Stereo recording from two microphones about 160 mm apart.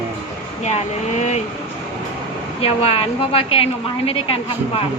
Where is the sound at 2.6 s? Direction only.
35° left (ahead or behind).